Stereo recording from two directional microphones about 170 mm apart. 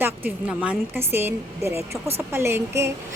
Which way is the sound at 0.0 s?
10° right (ahead or behind).